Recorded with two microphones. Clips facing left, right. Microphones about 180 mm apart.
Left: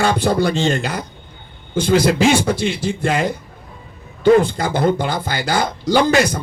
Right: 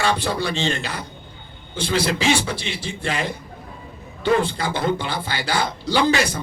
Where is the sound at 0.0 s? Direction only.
45° left (ahead or behind).